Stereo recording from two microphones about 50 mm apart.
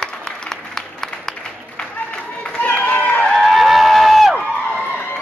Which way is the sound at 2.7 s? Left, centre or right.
Left.